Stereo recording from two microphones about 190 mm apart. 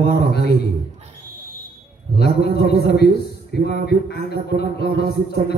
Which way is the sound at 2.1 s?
60° left (ahead or behind).